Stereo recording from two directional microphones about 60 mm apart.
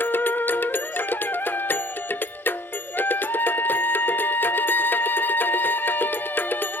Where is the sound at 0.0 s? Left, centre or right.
Left.